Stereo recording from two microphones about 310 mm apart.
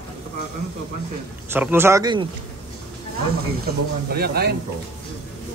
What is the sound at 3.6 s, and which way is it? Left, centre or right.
Speech, right.